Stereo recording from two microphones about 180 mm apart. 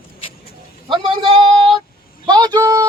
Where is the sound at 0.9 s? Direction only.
30° right (ahead or behind).